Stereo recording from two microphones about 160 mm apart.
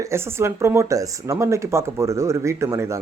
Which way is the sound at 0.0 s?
15° right (ahead or behind).